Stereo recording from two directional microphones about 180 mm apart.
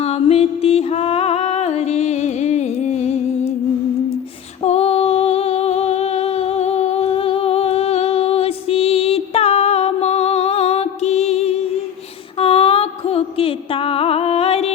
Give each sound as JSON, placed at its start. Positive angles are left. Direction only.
{"t": 0.0, "sound": "music", "side_deg": 35}
{"t": 4.6, "sound": "humming", "side_deg": 35}
{"t": 12.4, "sound": "music", "side_deg": 30}